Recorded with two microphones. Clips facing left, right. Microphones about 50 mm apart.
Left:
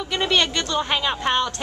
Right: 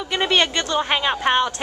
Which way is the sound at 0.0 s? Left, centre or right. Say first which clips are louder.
Right 2 dB; centre.